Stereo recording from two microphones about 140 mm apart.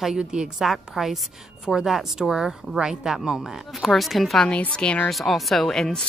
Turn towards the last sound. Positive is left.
turn(degrees=5)  # may be behind; listen again after turning